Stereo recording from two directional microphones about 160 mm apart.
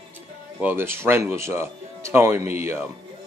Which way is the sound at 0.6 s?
10° right (ahead or behind).